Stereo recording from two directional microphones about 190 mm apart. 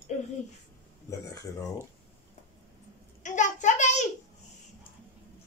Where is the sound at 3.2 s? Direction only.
40° left (ahead or behind).